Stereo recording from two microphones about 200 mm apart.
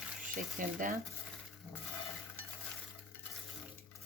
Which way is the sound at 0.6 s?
40° right (ahead or behind).